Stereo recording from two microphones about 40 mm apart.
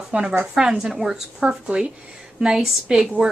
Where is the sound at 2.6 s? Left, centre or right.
Centre.